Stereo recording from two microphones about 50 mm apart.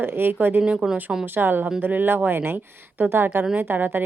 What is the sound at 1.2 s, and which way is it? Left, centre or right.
A woman's voice, right.